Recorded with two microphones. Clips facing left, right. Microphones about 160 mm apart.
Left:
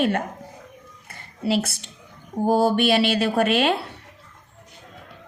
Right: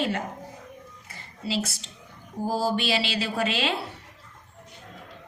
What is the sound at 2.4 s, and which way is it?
Speech, 60° left (ahead or behind).